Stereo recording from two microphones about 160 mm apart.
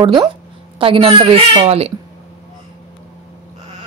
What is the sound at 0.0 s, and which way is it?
A woman's voice, 30° right (ahead or behind).